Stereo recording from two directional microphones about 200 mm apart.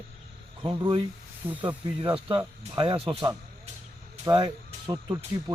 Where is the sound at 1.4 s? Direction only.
10° right (ahead or behind).